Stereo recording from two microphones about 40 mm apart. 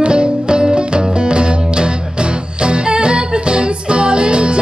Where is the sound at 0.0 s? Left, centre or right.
Right.